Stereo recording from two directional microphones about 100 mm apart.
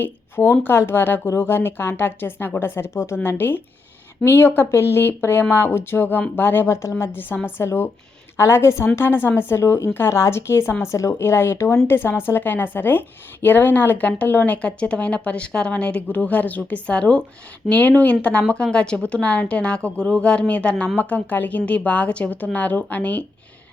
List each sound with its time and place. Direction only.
0.0 s a woman's voice: 20° left (ahead or behind)